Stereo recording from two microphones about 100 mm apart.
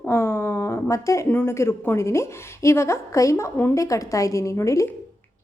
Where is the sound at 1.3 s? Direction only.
20° left (ahead or behind).